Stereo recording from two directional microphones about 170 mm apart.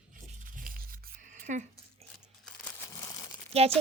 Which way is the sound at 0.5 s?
55° right (ahead or behind).